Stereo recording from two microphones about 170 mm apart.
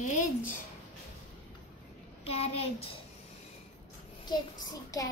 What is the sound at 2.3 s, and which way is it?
Speech, 35° left (ahead or behind).